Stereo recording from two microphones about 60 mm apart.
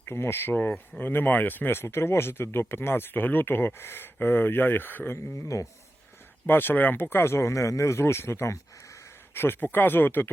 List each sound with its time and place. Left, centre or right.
0.1 s speech: left
5.5 s speech: left
6.4 s speech: left
9.4 s speech: left